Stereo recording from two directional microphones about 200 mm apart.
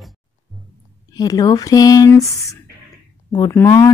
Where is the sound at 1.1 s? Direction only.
20° left (ahead or behind).